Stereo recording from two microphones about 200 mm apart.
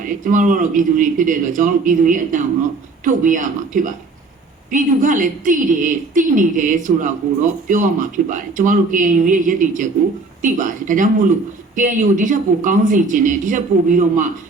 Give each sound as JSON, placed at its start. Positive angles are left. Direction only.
{"t": 0.0, "sound": "a woman's voice", "side_deg": -40}